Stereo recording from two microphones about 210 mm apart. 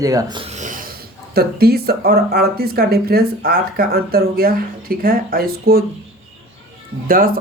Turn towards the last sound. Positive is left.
turn(degrees=-45)  # may be behind; listen again after turning